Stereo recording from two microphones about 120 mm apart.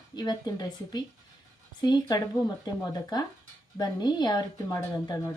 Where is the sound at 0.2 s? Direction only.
35° left (ahead or behind).